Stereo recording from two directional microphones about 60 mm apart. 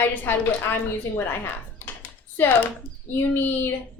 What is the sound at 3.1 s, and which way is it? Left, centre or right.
Speech, left.